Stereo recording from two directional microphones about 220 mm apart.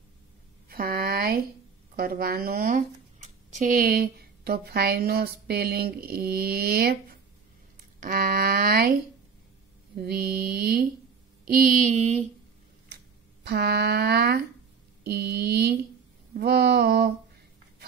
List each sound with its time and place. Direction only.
0.7 s a sound: 40° right (ahead or behind)
2.0 s a woman's voice: 45° right (ahead or behind)
12.9 s a woman's voice: 45° right (ahead or behind)